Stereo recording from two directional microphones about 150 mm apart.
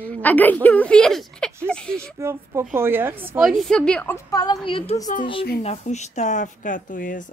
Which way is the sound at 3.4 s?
Centre (ahead or behind).